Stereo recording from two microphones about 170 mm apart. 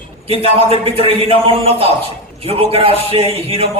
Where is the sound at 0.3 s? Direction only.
35° right (ahead or behind).